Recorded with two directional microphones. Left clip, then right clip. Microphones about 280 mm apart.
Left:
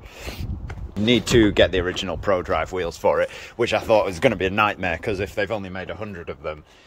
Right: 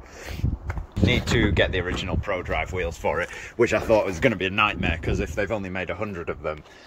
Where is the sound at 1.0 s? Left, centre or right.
Left.